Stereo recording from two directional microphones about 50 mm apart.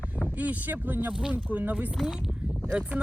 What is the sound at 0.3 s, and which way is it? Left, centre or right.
Speech, right.